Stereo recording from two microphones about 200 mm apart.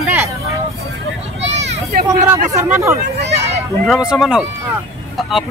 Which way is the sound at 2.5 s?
15° right (ahead or behind).